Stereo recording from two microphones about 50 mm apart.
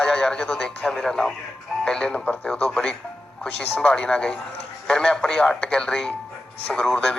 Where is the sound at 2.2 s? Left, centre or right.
Left.